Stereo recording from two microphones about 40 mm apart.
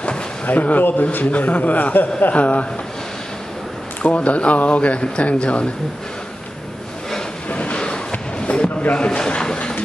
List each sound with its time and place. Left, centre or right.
0.5 s a man's voice: left
1.2 s a man's voice: left
4.0 s a man's voice: left
7.4 s a sound: left
8.9 s speech: left